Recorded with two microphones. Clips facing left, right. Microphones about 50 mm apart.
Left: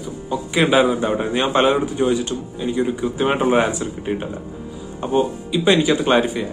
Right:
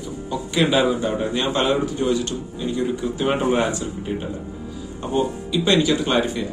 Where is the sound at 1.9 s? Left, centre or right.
Centre.